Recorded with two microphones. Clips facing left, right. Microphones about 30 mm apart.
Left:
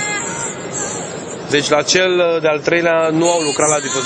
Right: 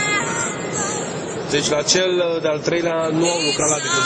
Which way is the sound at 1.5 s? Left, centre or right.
Left.